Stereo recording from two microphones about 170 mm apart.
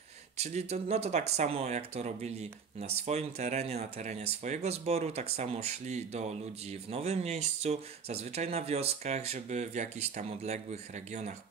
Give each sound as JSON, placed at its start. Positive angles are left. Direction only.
{"t": 0.4, "sound": "speech", "side_deg": -40}